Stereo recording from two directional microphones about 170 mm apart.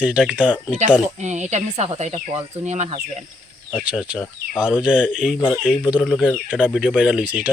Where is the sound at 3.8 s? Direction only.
5° right (ahead or behind).